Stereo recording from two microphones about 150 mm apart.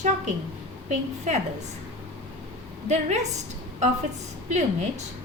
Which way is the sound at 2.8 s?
50° right (ahead or behind).